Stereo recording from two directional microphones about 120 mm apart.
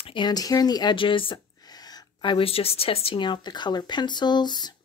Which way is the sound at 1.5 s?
35° left (ahead or behind).